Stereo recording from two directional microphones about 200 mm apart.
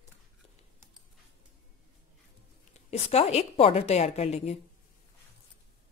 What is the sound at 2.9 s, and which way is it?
A woman's voice, 30° left (ahead or behind).